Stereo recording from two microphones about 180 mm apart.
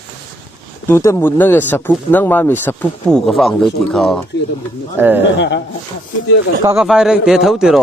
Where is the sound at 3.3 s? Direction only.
Centre (ahead or behind).